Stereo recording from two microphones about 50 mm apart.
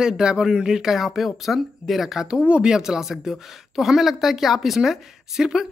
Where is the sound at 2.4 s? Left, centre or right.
Right.